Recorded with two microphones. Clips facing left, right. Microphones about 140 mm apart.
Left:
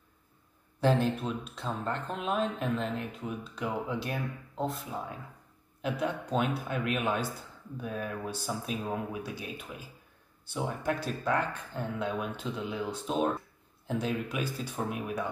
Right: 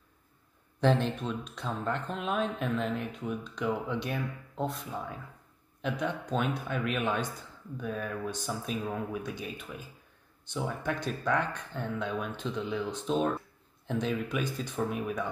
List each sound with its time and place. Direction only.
0.7 s speech: 5° left (ahead or behind)